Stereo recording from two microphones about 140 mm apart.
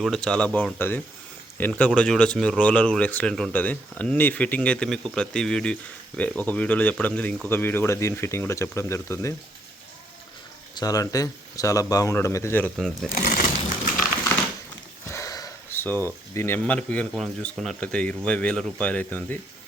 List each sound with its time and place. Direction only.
0.0 s speech: 5° left (ahead or behind); by 9.3 s 20° left (ahead or behind)
10.8 s speech: 25° left (ahead or behind)
12.7 s speech: 5° left (ahead or behind)
13.1 s speech: 90° left
15.0 s sniff: 20° left (ahead or behind)
16.3 s speech: 15° left (ahead or behind)